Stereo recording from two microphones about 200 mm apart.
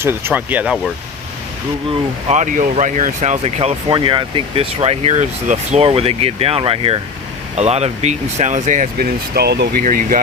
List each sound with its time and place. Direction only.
0.0 s speech: 10° right (ahead or behind)
2.3 s speech: 40° right (ahead or behind)
9.8 s speech: 40° right (ahead or behind)